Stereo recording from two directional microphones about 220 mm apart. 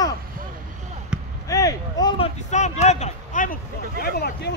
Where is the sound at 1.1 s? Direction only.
5° right (ahead or behind).